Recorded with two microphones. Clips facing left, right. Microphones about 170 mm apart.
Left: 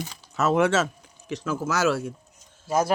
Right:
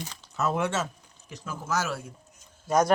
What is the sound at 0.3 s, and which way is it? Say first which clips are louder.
Speech: left 6 dB; 90° left.